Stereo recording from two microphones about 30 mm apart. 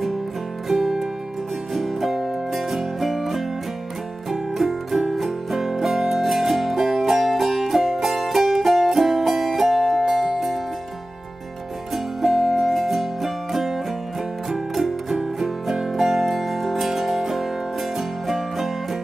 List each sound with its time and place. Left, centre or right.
0.7 s music: centre
11.9 s music: centre
16.0 s music: centre